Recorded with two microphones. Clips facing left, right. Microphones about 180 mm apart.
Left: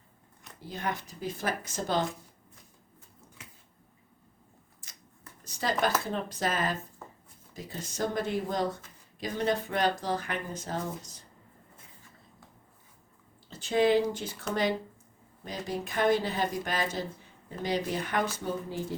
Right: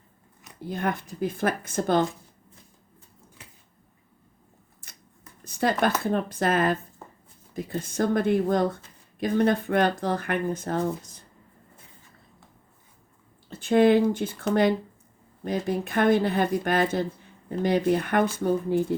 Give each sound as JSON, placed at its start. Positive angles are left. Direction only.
{"t": 0.7, "sound": "speech", "side_deg": -55}
{"t": 4.8, "sound": "a sound", "side_deg": -55}
{"t": 6.1, "sound": "speech", "side_deg": -55}
{"t": 13.5, "sound": "speech", "side_deg": -55}
{"t": 15.4, "sound": "speech", "side_deg": -55}